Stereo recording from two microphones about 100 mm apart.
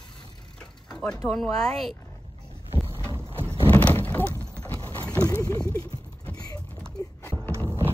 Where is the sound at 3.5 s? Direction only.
15° left (ahead or behind).